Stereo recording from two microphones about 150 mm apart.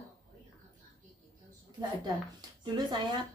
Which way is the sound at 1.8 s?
25° right (ahead or behind).